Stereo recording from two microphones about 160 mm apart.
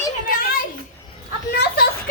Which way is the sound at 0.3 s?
65° left (ahead or behind).